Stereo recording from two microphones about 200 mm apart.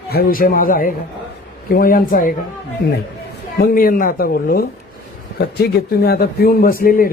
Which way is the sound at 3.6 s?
45° left (ahead or behind).